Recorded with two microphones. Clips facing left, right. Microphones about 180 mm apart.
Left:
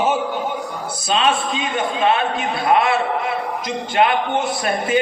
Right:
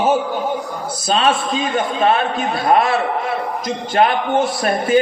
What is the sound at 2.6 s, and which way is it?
Speech, 40° right (ahead or behind).